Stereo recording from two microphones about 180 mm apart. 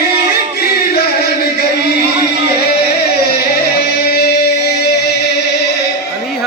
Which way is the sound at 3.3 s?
60° left (ahead or behind).